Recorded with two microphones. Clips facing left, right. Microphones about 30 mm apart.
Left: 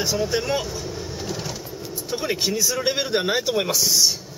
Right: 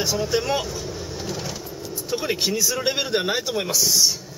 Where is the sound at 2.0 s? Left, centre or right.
Centre.